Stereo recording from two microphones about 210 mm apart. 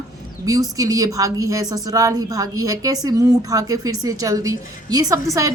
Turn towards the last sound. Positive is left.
turn(degrees=-15)  # may be behind; listen again after turning